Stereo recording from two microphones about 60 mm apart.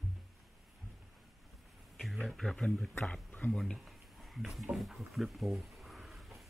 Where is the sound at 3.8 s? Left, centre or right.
Centre.